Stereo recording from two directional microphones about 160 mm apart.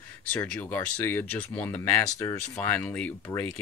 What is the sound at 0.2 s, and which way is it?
Speech, 10° left (ahead or behind).